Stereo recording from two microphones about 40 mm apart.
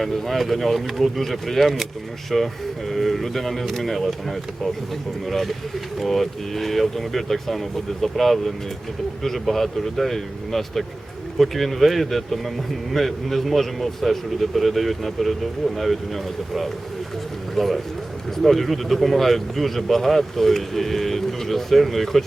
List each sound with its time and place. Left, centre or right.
0.0 s speech: centre
17.5 s a man's voice: centre